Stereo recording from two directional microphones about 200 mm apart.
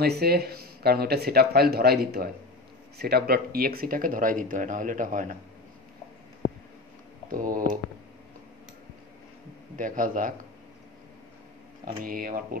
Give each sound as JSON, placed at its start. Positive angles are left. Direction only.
{"t": 0.0, "sound": "a man's voice", "side_deg": -50}
{"t": 7.2, "sound": "a man's voice", "side_deg": -45}
{"t": 9.8, "sound": "speech", "side_deg": -40}
{"t": 11.8, "sound": "a man's voice", "side_deg": -45}